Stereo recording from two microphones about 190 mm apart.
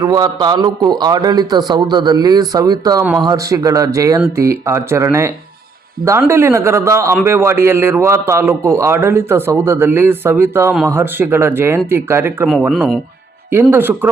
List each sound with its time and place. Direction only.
0.0 s a man's voice: 20° right (ahead or behind)
13.5 s a man's voice: 10° right (ahead or behind)